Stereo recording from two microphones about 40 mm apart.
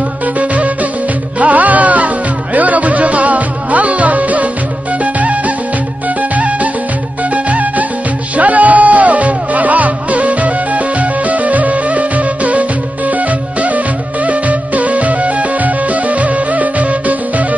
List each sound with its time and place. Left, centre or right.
1.4 s music: right